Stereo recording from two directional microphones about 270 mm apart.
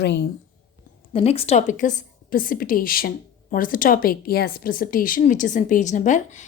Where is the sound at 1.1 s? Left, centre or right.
Left.